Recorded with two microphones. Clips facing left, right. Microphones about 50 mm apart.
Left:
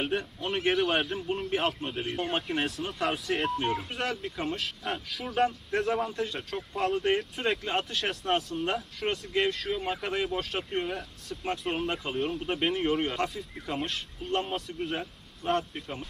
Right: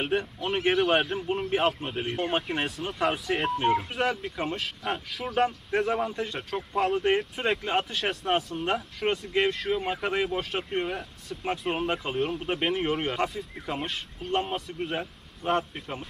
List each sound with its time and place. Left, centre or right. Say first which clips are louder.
0.0 s speech: right 3 dB; centre